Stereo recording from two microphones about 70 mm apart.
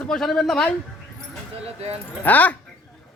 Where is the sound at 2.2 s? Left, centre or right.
Left.